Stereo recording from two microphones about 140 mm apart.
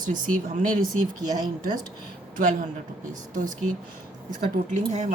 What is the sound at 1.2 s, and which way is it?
Speech, 25° right (ahead or behind).